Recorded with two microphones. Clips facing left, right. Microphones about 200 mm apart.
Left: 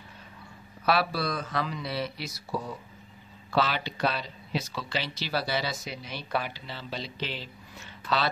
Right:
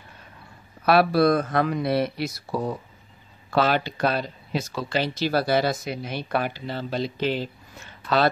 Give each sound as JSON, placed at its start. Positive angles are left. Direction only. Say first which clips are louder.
{"t": 0.8, "sound": "speech", "louder": "right 9 dB", "side_deg": -55}